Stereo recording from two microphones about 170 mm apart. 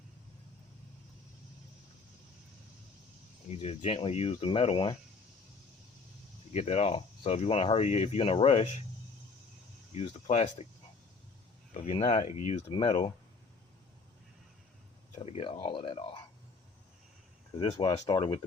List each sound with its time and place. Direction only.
3.5 s speech: 35° left (ahead or behind)
6.5 s speech: 40° left (ahead or behind)
9.9 s speech: 40° left (ahead or behind)
11.7 s speech: 35° left (ahead or behind)
15.2 s speech: 35° left (ahead or behind)
17.6 s speech: 30° left (ahead or behind)